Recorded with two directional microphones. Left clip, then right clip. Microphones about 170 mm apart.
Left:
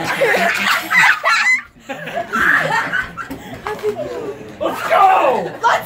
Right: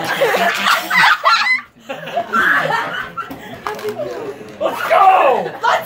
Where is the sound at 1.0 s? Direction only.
50° right (ahead or behind).